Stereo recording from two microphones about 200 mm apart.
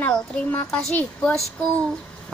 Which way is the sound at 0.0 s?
5° left (ahead or behind).